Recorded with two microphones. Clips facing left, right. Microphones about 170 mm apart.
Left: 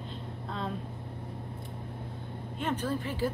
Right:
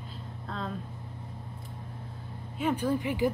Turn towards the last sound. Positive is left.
turn(degrees=-15)  # may be behind; listen again after turning